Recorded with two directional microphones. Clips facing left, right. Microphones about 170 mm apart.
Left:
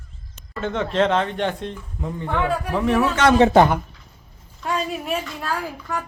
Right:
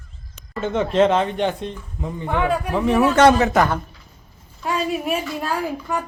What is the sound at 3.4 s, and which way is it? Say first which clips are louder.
Speech: left 4 dB; 30° left (ahead or behind).